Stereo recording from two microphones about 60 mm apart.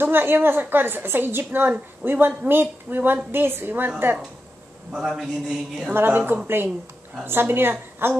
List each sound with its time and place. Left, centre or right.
0.0 s a woman's voice: right
4.9 s a man's voice: centre
5.9 s a woman's voice: right